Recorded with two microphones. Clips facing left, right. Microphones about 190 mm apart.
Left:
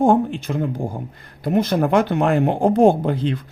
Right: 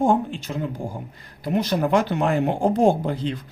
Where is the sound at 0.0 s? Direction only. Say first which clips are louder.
Left 4 dB; 55° left (ahead or behind).